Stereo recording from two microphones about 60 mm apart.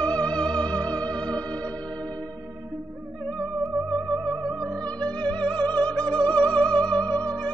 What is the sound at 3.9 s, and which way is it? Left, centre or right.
Music, centre.